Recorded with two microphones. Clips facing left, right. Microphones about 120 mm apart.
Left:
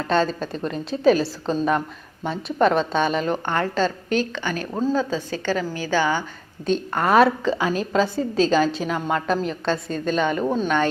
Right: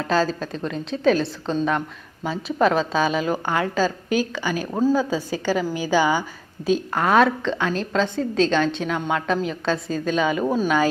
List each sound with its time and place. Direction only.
0.0 s a woman's voice: centre (ahead or behind)